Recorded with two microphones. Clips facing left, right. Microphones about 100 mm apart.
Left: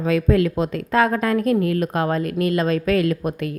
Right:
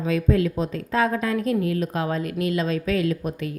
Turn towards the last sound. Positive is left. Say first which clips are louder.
# left 3 dB
turn(degrees=60)  # may be behind; listen again after turning